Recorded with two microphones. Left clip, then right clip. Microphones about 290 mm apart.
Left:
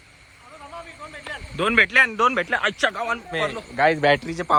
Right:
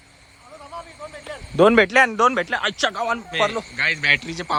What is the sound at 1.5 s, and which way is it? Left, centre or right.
A man's voice, centre.